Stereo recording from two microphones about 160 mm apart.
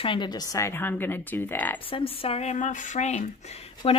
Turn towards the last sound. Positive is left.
turn(degrees=40)  # may be behind; listen again after turning